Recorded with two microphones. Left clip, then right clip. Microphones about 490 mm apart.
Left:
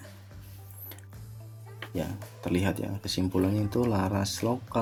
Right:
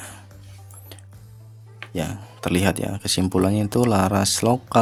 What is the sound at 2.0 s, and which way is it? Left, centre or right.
Speech, left.